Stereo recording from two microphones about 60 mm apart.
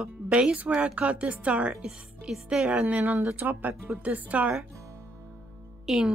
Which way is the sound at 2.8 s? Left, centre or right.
Right.